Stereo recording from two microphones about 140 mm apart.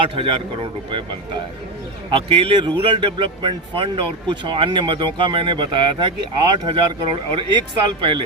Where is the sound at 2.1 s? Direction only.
40° right (ahead or behind).